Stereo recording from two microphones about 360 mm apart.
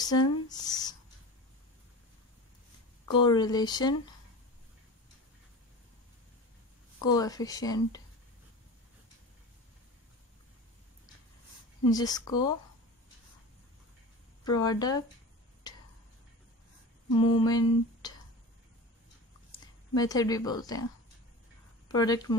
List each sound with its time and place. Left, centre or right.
0.0 s speech: centre
3.2 s speech: centre
7.0 s speech: centre
11.9 s speech: centre
14.4 s speech: centre
17.1 s speech: centre
20.0 s speech: centre
21.8 s speech: centre